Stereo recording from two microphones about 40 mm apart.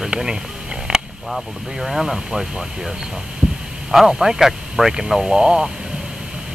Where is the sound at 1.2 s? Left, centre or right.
Centre.